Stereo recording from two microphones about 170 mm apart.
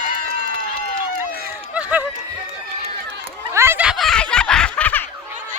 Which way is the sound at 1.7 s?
10° right (ahead or behind).